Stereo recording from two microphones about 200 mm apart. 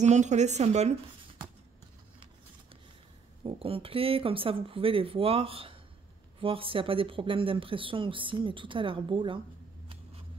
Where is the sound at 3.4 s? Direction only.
25° right (ahead or behind).